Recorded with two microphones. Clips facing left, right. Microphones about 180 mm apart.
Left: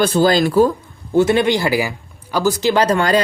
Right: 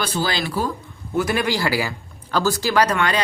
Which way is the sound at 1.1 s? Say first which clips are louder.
Left 7 dB; 25° left (ahead or behind).